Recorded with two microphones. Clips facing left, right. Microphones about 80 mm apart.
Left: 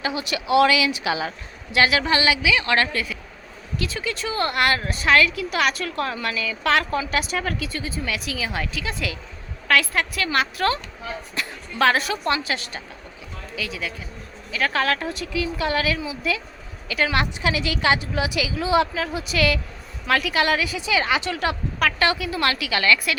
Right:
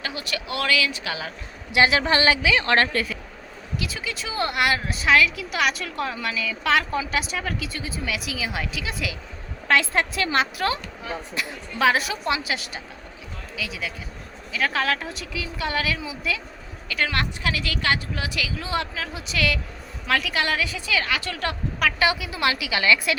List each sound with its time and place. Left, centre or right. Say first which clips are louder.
0.0 s a woman's voice: left 4 dB; centre
1.7 s a woman's voice: even; right
3.8 s a woman's voice: left 4 dB; centre
9.6 s a woman's voice: even; right; by 20.7 s centre
20.7 s a woman's voice: left 4 dB; centre
21.8 s a woman's voice: even; centre